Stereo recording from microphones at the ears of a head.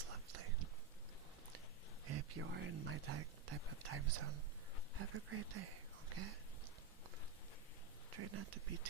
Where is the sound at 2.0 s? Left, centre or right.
Right.